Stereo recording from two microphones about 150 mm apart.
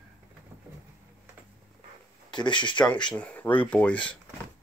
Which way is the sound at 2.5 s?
30° left (ahead or behind).